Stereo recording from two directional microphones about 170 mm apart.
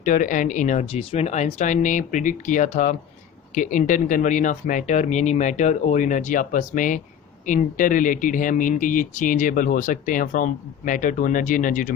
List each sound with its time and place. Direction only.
0.0 s speech: 50° left (ahead or behind)